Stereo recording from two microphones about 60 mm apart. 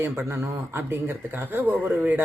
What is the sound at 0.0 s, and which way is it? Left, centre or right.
Speech, right.